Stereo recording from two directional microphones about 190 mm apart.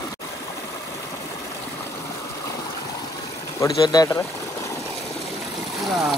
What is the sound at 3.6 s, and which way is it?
Speech, 20° left (ahead or behind).